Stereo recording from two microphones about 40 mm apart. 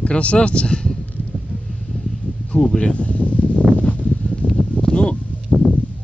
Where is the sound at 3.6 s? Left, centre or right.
Right.